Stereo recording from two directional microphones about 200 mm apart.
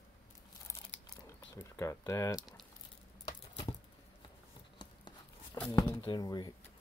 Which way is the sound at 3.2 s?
20° left (ahead or behind).